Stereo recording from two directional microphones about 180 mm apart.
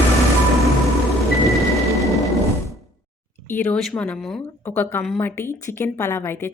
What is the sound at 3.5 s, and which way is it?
A woman's voice, 10° left (ahead or behind).